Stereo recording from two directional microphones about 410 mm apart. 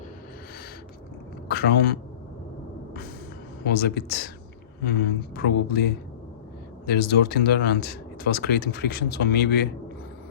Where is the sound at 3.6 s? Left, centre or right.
Left.